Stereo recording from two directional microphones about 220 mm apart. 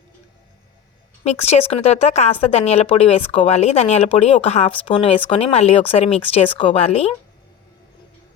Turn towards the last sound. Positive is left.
turn(degrees=25)  # may be behind; listen again after turning